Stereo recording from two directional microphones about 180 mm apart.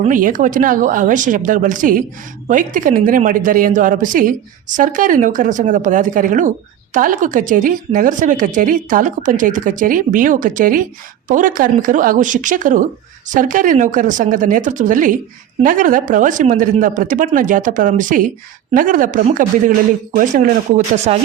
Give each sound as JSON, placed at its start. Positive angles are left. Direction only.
{"t": 0.0, "sound": "a woman's voice", "side_deg": -50}